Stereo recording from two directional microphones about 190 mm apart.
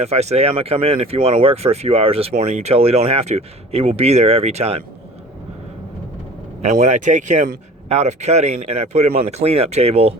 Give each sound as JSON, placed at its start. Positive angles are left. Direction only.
{"t": 0.0, "sound": "speech", "side_deg": -35}
{"t": 6.6, "sound": "speech", "side_deg": -40}